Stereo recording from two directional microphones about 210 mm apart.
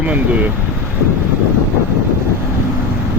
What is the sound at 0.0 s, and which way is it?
Speech, 5° right (ahead or behind).